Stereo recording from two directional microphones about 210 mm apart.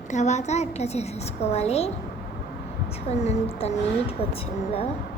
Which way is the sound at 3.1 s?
30° left (ahead or behind).